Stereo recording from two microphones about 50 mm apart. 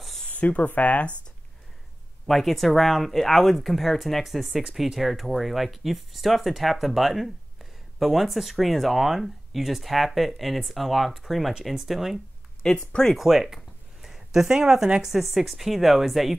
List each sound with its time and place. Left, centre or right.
0.3 s speech: left
2.2 s speech: centre
12.6 s speech: centre
13.1 s speech: centre